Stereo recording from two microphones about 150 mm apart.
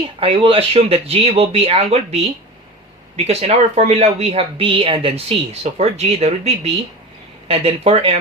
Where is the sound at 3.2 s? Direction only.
45° right (ahead or behind).